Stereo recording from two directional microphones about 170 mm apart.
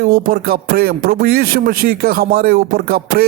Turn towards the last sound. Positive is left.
turn(degrees=-60)  # may be behind; listen again after turning